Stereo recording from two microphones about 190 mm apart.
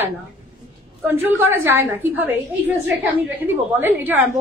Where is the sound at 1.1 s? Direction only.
10° right (ahead or behind).